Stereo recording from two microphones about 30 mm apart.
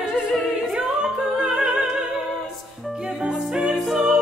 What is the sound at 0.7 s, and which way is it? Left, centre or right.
Music, right.